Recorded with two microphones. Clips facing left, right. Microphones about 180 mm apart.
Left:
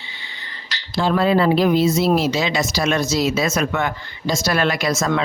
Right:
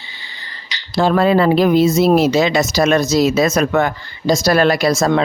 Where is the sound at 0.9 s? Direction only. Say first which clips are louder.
Right 4 dB; 45° right (ahead or behind).